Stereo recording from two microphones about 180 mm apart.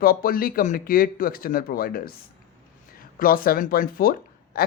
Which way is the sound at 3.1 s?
50° left (ahead or behind).